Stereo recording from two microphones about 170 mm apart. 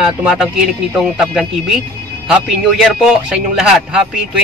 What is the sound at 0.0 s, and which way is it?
Speech, centre (ahead or behind).